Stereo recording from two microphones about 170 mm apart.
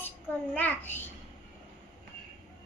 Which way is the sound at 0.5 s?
10° left (ahead or behind).